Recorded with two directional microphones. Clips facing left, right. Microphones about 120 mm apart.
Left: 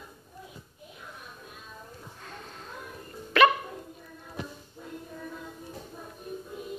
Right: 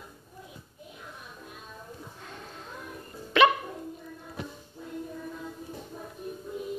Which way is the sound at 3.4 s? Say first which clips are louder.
Even; 20° right (ahead or behind).